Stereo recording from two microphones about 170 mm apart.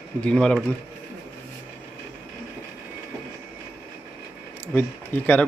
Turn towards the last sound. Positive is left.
turn(degrees=10)  # may be behind; listen again after turning